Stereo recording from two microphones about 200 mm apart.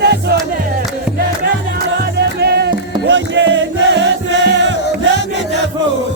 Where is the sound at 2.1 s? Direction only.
55° right (ahead or behind).